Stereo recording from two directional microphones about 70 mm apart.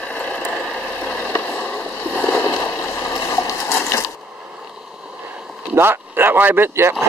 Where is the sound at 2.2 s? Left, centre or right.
Left.